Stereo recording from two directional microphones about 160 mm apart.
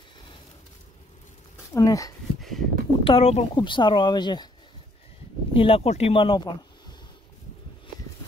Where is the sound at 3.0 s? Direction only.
40° left (ahead or behind).